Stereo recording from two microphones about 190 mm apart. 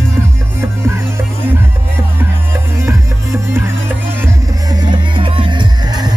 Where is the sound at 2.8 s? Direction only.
15° right (ahead or behind).